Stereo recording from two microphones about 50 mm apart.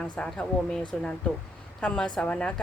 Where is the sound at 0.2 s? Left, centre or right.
Centre.